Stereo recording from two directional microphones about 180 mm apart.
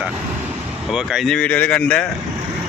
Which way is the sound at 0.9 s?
Centre (ahead or behind).